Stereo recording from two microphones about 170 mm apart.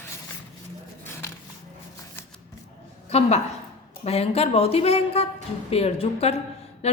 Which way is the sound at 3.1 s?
40° left (ahead or behind).